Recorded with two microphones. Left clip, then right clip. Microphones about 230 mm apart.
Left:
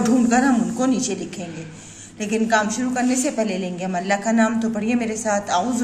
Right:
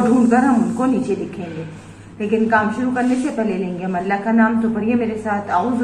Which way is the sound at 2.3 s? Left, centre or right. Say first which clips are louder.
Right 3 dB; left.